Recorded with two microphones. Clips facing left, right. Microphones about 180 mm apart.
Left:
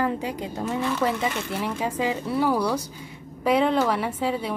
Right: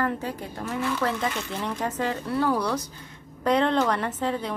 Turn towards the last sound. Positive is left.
turn(degrees=10)  # may be behind; listen again after turning